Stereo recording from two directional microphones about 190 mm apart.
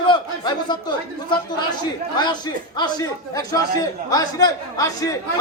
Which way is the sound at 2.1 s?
20° left (ahead or behind).